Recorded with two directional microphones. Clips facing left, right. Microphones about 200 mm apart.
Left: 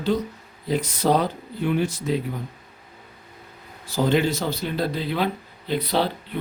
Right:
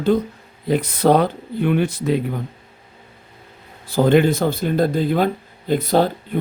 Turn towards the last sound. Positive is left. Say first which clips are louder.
# right 6 dB
turn(degrees=-45)  # may be behind; listen again after turning